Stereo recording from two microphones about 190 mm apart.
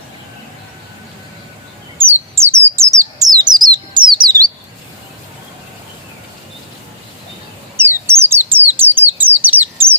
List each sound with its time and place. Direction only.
2.0 s bird: 10° right (ahead or behind)
7.8 s bird: 10° right (ahead or behind)